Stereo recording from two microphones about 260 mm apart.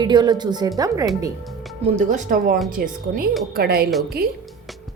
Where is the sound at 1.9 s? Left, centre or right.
Right.